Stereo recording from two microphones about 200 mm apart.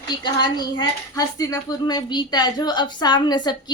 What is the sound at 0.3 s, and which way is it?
Speech, 20° left (ahead or behind).